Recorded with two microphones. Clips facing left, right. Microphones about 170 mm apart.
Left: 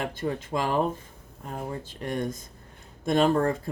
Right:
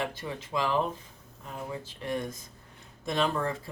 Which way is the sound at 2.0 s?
50° left (ahead or behind).